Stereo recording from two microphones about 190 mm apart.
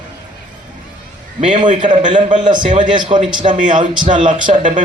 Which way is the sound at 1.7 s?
25° right (ahead or behind).